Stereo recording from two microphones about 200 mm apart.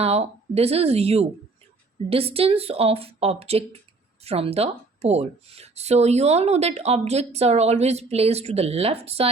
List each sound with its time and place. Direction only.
0.0 s a woman's voice: 30° right (ahead or behind)